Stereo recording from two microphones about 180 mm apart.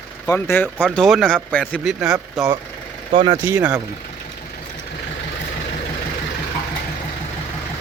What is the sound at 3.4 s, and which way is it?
Speech, 10° right (ahead or behind).